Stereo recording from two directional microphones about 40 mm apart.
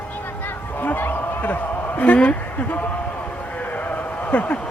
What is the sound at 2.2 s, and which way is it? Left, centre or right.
Speech, left.